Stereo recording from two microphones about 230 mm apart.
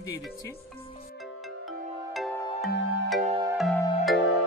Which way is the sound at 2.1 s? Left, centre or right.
Centre.